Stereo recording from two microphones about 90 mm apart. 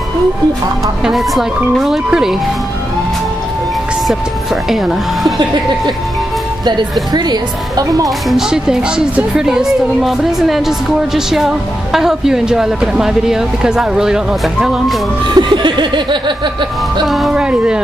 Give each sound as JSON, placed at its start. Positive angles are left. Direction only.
{"t": 1.0, "sound": "speech", "side_deg": 0}
{"t": 4.6, "sound": "speech", "side_deg": 0}
{"t": 5.4, "sound": "speech", "side_deg": -55}
{"t": 8.3, "sound": "speech", "side_deg": -5}
{"t": 15.2, "sound": "snicker", "side_deg": -55}
{"t": 17.0, "sound": "speech", "side_deg": 0}